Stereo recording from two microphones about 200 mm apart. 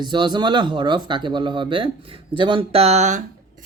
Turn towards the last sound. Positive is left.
turn(degrees=-35)  # may be behind; listen again after turning